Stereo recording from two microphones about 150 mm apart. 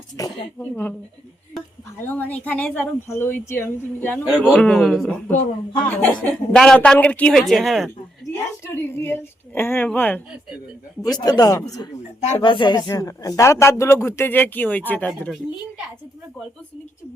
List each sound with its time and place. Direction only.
0.2 s speech: 25° left (ahead or behind)
2.0 s speech: 10° left (ahead or behind)
8.3 s a woman's voice: 15° left (ahead or behind)
11.1 s speech: 25° left (ahead or behind); by 15.3 s 10° left (ahead or behind)